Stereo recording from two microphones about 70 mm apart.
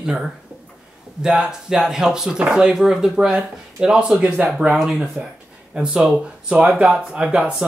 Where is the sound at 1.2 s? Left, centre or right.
Centre.